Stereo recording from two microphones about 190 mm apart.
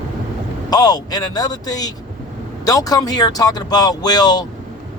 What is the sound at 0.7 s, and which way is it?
A man's voice, 20° left (ahead or behind).